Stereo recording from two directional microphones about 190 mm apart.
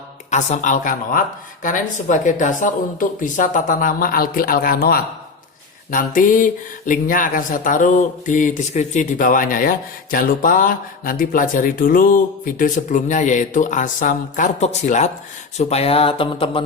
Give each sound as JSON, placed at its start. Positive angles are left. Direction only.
{"t": 0.3, "sound": "speech", "side_deg": 40}